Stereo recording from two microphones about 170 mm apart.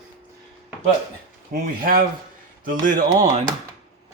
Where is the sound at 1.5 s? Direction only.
55° right (ahead or behind).